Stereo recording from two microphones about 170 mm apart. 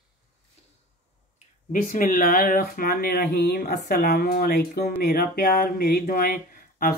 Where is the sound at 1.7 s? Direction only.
55° left (ahead or behind).